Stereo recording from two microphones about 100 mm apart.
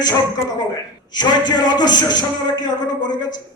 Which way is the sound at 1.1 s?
45° left (ahead or behind).